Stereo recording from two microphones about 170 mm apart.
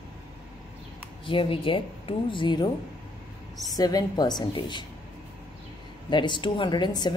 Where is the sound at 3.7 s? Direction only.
20° left (ahead or behind).